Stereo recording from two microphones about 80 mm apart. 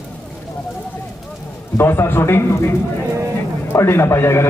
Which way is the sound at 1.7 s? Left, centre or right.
Left.